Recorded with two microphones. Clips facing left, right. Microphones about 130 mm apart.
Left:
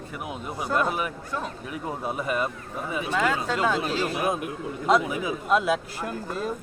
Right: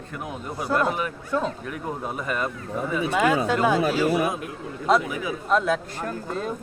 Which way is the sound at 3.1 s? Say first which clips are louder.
Right 4 dB; 15° right (ahead or behind).